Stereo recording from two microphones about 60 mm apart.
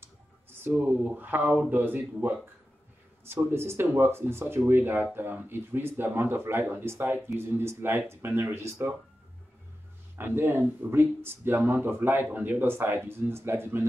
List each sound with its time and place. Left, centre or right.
0.7 s speech: right
3.4 s speech: right
10.1 s speech: right